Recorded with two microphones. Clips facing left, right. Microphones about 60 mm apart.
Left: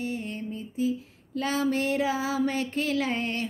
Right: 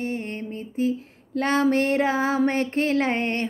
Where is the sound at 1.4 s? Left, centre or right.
Right.